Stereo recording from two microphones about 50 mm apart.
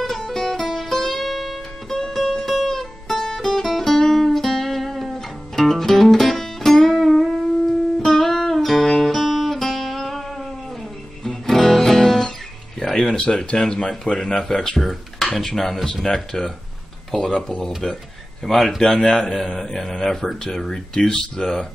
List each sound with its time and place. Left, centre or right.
0.0 s music: centre
13.5 s a man's voice: centre
17.8 s a man's voice: centre
18.4 s a man's voice: centre